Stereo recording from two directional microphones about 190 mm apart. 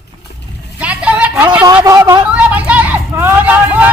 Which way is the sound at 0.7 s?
5° right (ahead or behind).